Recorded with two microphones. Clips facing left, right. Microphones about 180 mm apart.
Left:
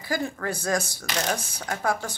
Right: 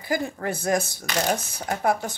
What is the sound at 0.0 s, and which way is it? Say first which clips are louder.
Speech: right 2 dB; 20° right (ahead or behind).